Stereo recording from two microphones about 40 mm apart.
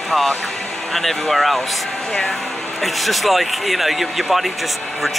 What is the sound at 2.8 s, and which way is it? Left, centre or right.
Speech, centre.